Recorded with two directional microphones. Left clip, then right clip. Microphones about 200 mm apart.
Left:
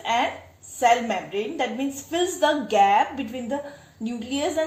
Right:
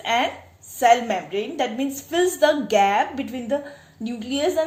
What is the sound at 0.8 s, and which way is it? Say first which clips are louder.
A woman's voice: right 3 dB; 35° right (ahead or behind).